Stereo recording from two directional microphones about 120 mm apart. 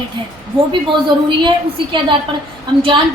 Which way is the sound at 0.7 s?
40° right (ahead or behind).